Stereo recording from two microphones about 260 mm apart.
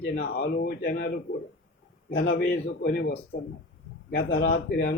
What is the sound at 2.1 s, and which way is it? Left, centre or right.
Speech, left.